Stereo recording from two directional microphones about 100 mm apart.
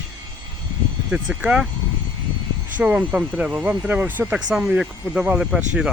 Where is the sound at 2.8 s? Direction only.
10° right (ahead or behind).